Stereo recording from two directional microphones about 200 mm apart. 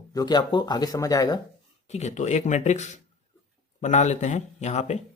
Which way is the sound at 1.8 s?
35° left (ahead or behind).